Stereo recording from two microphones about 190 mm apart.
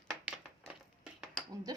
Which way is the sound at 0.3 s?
5° right (ahead or behind).